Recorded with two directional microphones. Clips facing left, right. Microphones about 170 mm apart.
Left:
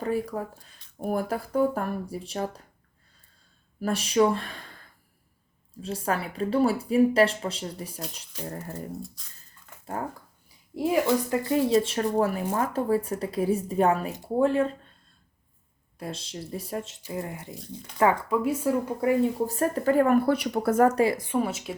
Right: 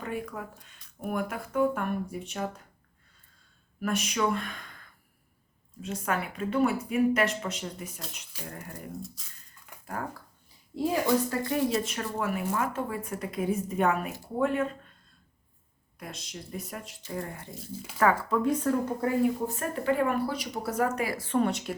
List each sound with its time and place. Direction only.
0.0 s speech: 35° left (ahead or behind)
3.8 s speech: 30° left (ahead or behind)
5.8 s speech: 30° left (ahead or behind)
9.0 s a woman's voice: centre (ahead or behind)
9.8 s speech: 25° left (ahead or behind)
11.3 s speech: 20° left (ahead or behind)
16.0 s speech: 30° left (ahead or behind)
17.5 s a woman's voice: 5° right (ahead or behind)
17.9 s speech: 15° left (ahead or behind)
19.5 s speech: 40° left (ahead or behind)
20.9 s speech: 25° left (ahead or behind)
21.2 s a woman's voice: 10° left (ahead or behind)